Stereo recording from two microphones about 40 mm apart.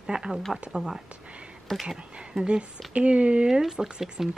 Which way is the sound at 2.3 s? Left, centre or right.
Right.